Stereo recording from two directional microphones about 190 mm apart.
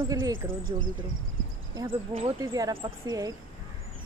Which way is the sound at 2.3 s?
20° right (ahead or behind).